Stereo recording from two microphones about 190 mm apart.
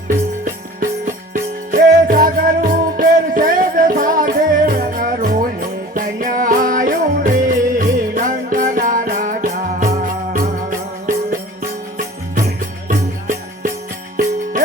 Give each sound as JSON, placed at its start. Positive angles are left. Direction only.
{"t": 0.8, "sound": "music", "side_deg": -45}